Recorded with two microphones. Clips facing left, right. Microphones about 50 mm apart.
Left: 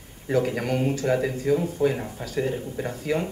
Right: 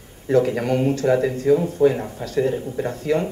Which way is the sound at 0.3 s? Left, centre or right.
Centre.